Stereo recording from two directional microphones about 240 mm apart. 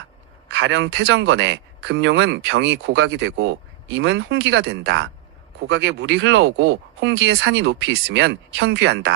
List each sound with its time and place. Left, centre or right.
0.4 s speech: right